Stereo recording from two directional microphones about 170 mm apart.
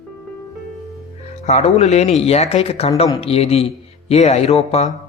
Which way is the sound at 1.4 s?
40° left (ahead or behind).